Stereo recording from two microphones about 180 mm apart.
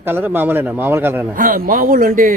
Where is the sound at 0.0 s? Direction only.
10° right (ahead or behind).